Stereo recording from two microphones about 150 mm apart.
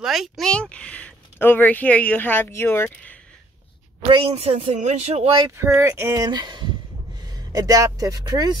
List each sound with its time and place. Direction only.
0.0 s speech: centre (ahead or behind); by 3.2 s 15° left (ahead or behind)
4.1 s speech: 35° right (ahead or behind)
5.6 s speech: 15° right (ahead or behind)